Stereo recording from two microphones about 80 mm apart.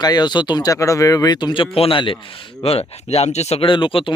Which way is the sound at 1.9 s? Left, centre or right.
Left.